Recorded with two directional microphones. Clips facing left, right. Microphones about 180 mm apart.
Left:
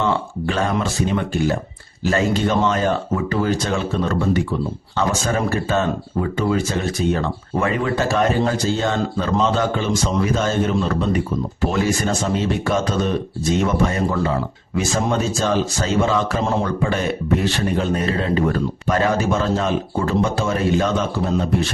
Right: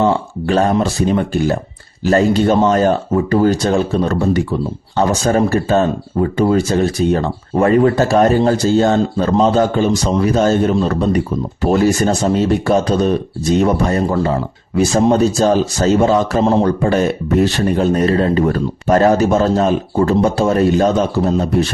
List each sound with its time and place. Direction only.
0.0 s a man's voice: 35° right (ahead or behind)
2.0 s a man's voice: 40° right (ahead or behind)